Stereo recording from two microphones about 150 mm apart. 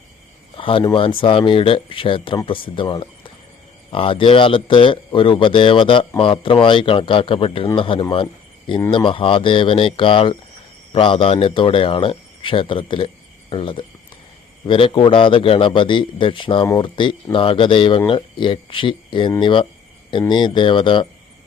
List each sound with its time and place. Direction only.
0.5 s cricket: 35° left (ahead or behind)
0.9 s a man's voice: 35° left (ahead or behind)
8.1 s a sound: 35° left (ahead or behind)
8.9 s a man's voice: 35° left (ahead or behind)